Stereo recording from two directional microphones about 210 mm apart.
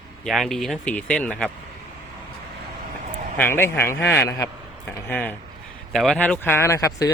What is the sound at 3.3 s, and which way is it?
Speech, 10° left (ahead or behind).